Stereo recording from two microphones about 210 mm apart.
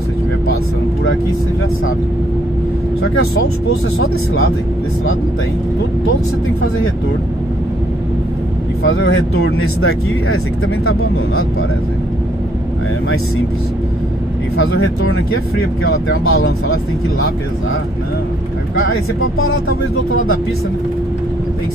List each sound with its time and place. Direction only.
8.8 s speech: 75° left (ahead or behind)
14.6 s speech: 80° left
19.3 s speech: 80° left